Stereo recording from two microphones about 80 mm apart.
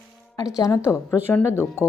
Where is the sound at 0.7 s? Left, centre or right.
Left.